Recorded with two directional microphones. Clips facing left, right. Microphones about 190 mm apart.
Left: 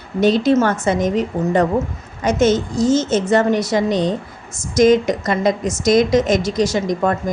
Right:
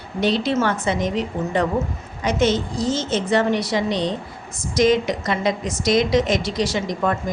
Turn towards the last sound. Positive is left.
turn(degrees=45)  # may be behind; listen again after turning